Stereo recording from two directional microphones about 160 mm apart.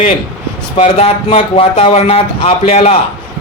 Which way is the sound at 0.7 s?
40° left (ahead or behind).